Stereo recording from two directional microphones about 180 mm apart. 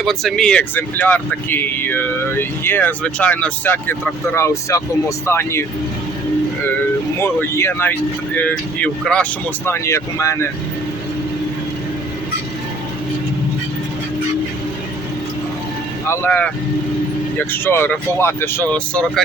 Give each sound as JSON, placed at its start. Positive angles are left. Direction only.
{"t": 0.0, "sound": "speech", "side_deg": 0}
{"t": 7.2, "sound": "speech", "side_deg": 10}
{"t": 16.0, "sound": "speech", "side_deg": 10}